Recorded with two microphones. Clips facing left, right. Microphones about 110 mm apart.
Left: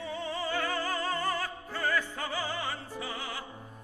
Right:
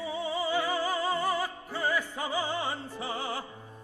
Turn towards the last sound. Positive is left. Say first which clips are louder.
# right 4 dB
turn(degrees=-30)  # may be behind; listen again after turning